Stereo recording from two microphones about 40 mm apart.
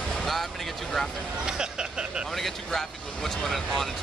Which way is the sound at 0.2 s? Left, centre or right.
Centre.